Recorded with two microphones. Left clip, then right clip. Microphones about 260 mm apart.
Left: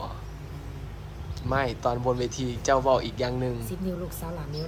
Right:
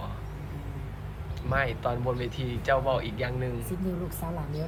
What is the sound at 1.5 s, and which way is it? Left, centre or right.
Speech, left.